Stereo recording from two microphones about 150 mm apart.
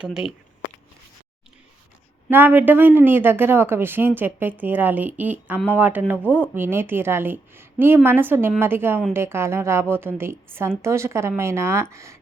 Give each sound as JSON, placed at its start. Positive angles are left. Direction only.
{"t": 0.0, "sound": "speech", "side_deg": -5}
{"t": 2.3, "sound": "a woman's voice", "side_deg": -15}